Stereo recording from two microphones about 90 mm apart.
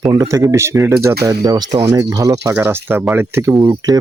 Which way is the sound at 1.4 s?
45° right (ahead or behind).